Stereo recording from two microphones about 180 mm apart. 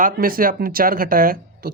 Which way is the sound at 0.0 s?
50° right (ahead or behind).